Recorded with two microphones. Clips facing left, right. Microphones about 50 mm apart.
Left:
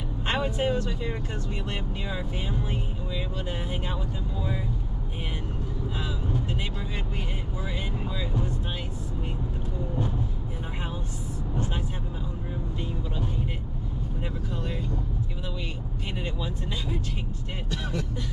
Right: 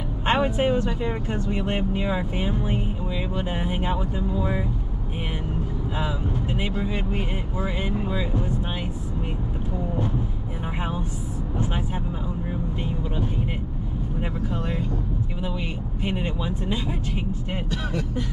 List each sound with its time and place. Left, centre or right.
0.3 s speech: right
5.9 s speech: right
14.2 s speech: centre
16.0 s speech: right